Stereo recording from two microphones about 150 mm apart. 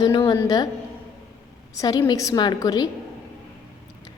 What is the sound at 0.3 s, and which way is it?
Speech, 25° left (ahead or behind).